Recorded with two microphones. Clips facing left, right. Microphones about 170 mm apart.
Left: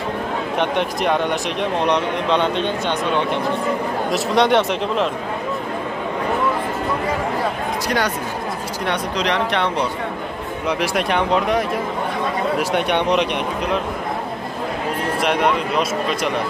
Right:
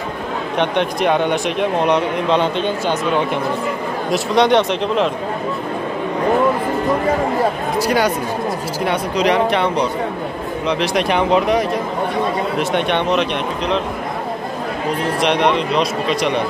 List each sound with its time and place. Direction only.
0.6 s speech: centre (ahead or behind)
8.8 s speech: 5° right (ahead or behind)
10.7 s speech: 10° left (ahead or behind)
12.7 s speech: 10° left (ahead or behind)
15.2 s speech: 5° left (ahead or behind)